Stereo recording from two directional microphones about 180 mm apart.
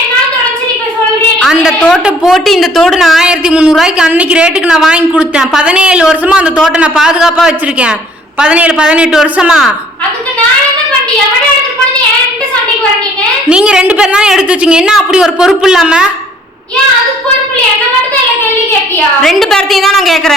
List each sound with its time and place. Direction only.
1.4 s a woman's voice: centre (ahead or behind)
13.5 s a woman's voice: 5° right (ahead or behind)
19.2 s a woman's voice: centre (ahead or behind)